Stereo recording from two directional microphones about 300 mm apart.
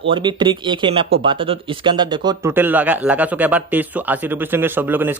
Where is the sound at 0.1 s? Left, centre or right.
Centre.